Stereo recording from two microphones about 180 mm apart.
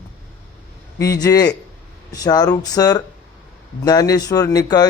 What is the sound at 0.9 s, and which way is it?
A man's voice, 20° left (ahead or behind).